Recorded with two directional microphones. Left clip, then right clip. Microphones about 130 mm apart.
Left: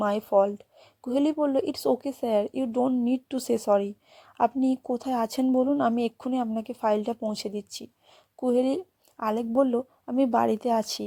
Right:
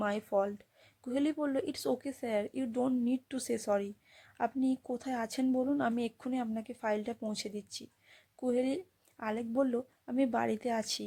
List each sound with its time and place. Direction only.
0.0 s speech: 25° left (ahead or behind)
5.8 s speech: 30° left (ahead or behind)